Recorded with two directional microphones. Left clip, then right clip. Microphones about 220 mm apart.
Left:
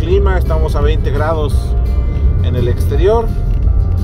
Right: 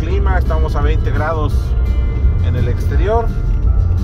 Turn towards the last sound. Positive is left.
turn(degrees=25)  # may be behind; listen again after turning